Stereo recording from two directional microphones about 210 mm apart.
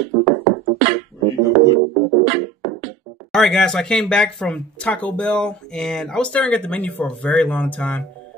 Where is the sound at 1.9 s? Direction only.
40° right (ahead or behind).